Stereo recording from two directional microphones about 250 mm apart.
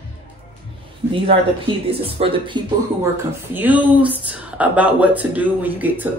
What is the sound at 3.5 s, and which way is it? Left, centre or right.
Speech, centre.